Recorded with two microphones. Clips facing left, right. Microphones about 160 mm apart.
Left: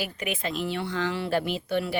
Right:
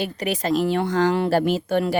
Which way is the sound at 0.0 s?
35° right (ahead or behind).